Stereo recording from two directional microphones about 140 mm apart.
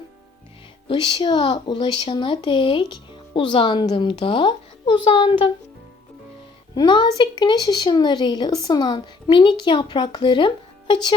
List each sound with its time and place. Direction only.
0.9 s speech: 40° left (ahead or behind)
6.7 s speech: 35° left (ahead or behind)